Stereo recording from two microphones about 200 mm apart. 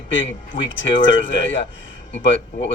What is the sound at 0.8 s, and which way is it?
Speech, 70° left (ahead or behind).